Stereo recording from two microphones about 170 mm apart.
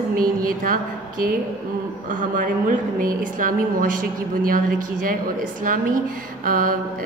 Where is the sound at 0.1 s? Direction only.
55° right (ahead or behind).